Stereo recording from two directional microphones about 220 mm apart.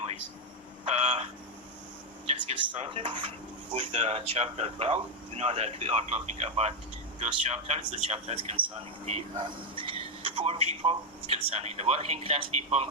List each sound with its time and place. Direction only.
0.9 s speech: 25° right (ahead or behind)